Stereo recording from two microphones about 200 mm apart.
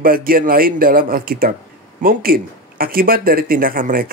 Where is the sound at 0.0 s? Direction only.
45° right (ahead or behind).